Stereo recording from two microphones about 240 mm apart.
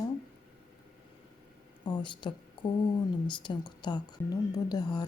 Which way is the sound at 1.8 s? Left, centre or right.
Centre.